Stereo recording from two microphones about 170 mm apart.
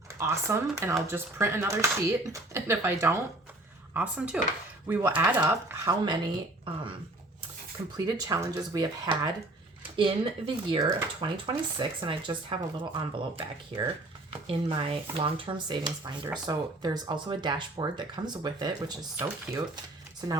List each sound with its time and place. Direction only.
0.1 s speech: 15° right (ahead or behind)
7.9 s speech: 20° right (ahead or behind)